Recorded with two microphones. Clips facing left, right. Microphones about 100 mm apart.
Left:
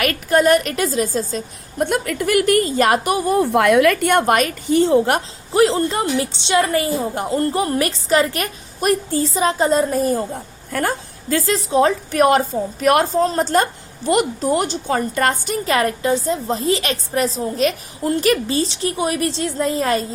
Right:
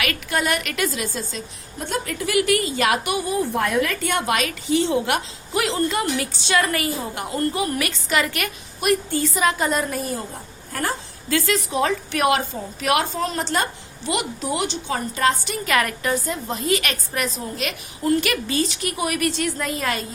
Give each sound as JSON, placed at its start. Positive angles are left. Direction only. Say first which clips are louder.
{"t": 0.0, "sound": "a woman's voice", "louder": "left 8 dB", "side_deg": 40}
{"t": 1.8, "sound": "a woman's voice", "louder": "left 7 dB", "side_deg": 60}
{"t": 3.3, "sound": "a woman's voice", "louder": "left 8 dB", "side_deg": 65}
{"t": 10.7, "sound": "a woman's voice", "louder": "left 5 dB", "side_deg": 55}
{"t": 11.3, "sound": "a woman's voice", "louder": "left 3 dB", "side_deg": 35}
{"t": 15.5, "sound": "a woman's voice", "louder": "left 4 dB", "side_deg": 30}